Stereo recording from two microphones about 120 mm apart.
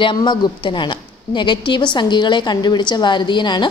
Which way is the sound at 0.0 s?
40° left (ahead or behind).